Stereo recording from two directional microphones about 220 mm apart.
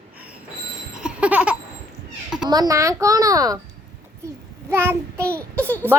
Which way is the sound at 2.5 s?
15° right (ahead or behind).